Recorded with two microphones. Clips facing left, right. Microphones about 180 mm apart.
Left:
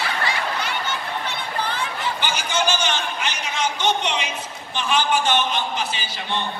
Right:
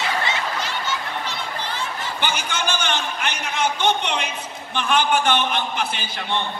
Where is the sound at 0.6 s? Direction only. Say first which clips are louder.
Even; 60° left (ahead or behind).